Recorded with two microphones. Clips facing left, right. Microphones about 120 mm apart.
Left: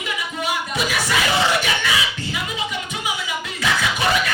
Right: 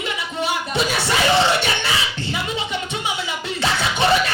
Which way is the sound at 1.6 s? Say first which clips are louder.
Even; 30° right (ahead or behind).